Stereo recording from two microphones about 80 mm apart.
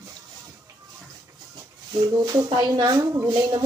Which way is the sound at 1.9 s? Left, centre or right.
Right.